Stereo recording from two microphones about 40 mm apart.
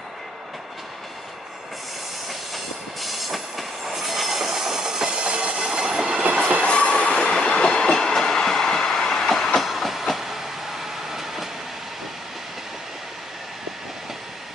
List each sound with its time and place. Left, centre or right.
2.2 s train: centre; by 5.6 s right
5.6 s train: centre
6.6 s train: left; by 11.4 s centre